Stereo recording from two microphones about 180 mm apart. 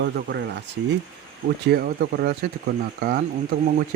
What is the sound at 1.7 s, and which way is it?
Speech, 60° right (ahead or behind).